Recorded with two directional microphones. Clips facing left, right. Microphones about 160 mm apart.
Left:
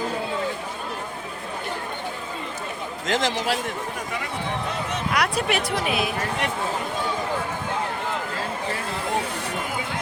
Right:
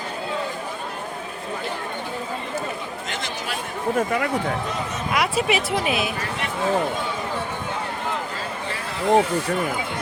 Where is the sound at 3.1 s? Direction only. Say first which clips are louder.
Left 10 dB; 90° left.